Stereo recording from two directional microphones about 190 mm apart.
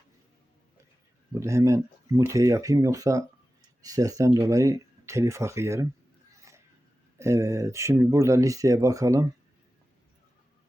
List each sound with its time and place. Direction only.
1.3 s speech: 15° right (ahead or behind)
6.5 s a sound: 15° right (ahead or behind)
7.2 s speech: 15° right (ahead or behind)